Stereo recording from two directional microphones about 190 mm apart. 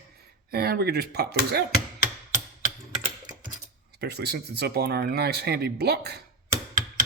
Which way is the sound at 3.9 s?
55° right (ahead or behind).